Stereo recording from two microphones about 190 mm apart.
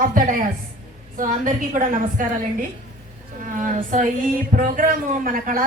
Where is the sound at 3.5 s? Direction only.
45° right (ahead or behind).